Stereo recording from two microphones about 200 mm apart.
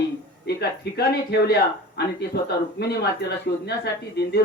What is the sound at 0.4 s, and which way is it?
Speech, 55° left (ahead or behind).